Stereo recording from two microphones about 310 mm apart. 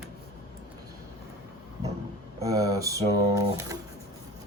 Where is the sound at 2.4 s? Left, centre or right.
Centre.